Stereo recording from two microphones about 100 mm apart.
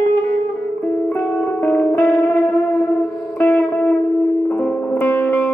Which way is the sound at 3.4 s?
15° left (ahead or behind).